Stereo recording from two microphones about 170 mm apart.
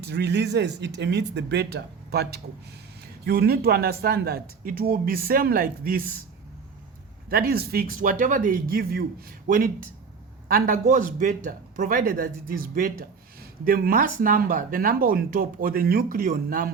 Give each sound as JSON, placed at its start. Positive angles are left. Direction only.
{"t": 0.0, "sound": "speech", "side_deg": -80}
{"t": 7.3, "sound": "a man's voice", "side_deg": -60}